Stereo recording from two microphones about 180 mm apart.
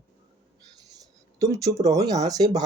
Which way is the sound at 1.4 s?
20° right (ahead or behind).